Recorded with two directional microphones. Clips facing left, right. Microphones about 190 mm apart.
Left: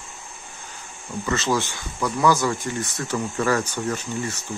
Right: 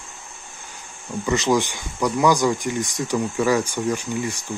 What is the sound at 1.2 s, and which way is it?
Speech, 15° right (ahead or behind).